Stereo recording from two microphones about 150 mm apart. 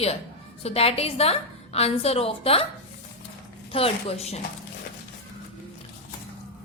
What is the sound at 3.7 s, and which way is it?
Speech, 40° left (ahead or behind).